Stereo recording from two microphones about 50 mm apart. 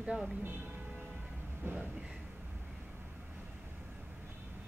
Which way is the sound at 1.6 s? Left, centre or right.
Right.